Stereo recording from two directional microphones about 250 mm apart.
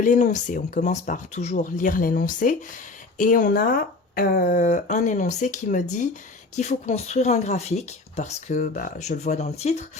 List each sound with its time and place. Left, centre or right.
0.0 s speech: left